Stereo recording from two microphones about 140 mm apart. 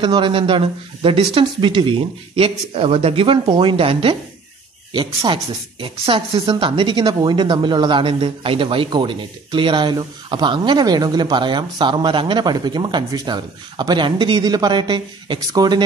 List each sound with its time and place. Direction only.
0.0 s speech: 35° right (ahead or behind)